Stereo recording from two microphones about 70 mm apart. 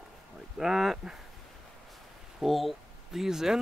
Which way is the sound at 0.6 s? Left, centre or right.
Centre.